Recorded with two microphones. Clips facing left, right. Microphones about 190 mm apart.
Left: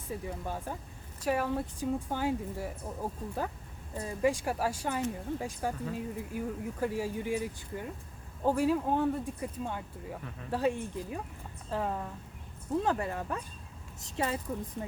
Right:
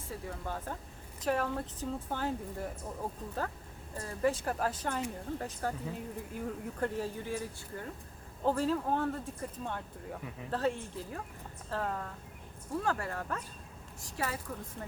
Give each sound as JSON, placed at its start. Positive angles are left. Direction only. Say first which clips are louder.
{"t": 0.1, "sound": "a woman's voice", "louder": "left 3 dB", "side_deg": 15}